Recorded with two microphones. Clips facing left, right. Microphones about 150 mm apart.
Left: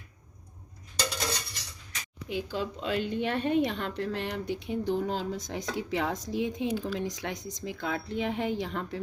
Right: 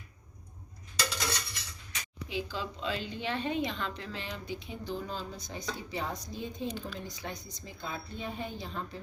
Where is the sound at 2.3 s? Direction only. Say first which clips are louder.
Left 4 dB; 55° left (ahead or behind).